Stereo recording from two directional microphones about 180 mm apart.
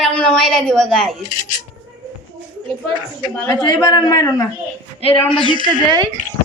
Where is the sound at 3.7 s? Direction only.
20° left (ahead or behind).